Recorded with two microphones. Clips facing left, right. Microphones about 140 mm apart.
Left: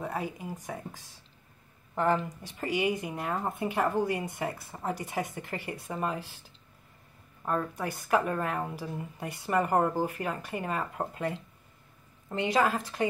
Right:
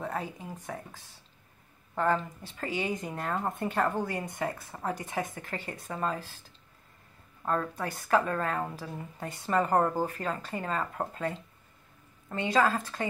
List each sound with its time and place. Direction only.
0.0 s speech: 10° left (ahead or behind)
7.4 s speech: 15° left (ahead or behind)